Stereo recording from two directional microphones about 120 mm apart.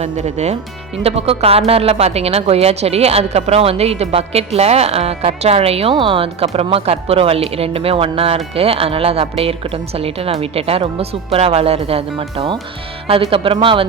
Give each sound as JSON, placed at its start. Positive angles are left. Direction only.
{"t": 0.0, "sound": "speech", "side_deg": -70}
{"t": 1.0, "sound": "a woman's voice", "side_deg": -55}